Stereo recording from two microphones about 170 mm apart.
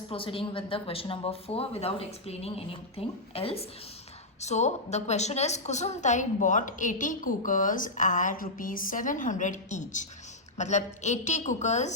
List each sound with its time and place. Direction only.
0.1 s a woman's voice: 30° left (ahead or behind)